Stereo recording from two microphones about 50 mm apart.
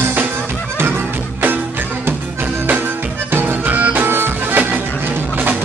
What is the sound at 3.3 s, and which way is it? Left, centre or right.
Music, right.